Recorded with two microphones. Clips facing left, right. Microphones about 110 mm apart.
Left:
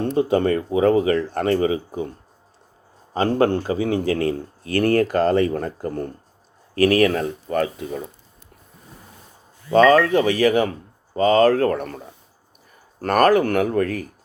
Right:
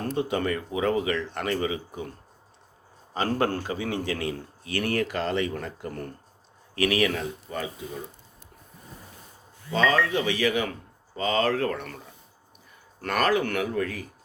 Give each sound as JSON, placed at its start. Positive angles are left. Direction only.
{"t": 0.0, "sound": "a man's voice", "side_deg": 30}
{"t": 3.2, "sound": "a man's voice", "side_deg": 30}
{"t": 7.5, "sound": "speech", "side_deg": 65}
{"t": 9.7, "sound": "speech", "side_deg": 50}